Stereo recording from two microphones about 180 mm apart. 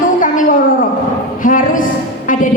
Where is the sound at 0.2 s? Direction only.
50° left (ahead or behind).